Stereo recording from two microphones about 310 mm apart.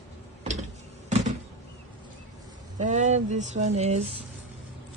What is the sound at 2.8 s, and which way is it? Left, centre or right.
Speech, right.